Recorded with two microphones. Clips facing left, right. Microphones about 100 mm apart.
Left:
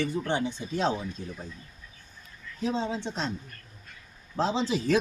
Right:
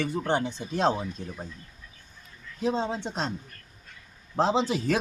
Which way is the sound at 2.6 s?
45° right (ahead or behind).